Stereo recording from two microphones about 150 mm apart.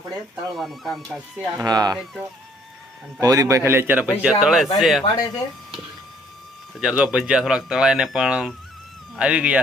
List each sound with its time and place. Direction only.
0.5 s speech: centre (ahead or behind)
1.5 s speech: 25° right (ahead or behind)
3.2 s a man's voice: 25° right (ahead or behind); by 5.0 s centre (ahead or behind)
6.7 s a man's voice: 5° right (ahead or behind)